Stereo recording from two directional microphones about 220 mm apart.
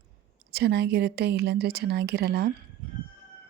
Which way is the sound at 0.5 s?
50° right (ahead or behind).